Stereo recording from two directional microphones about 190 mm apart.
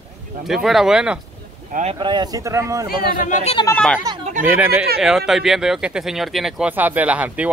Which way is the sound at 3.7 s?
5° left (ahead or behind).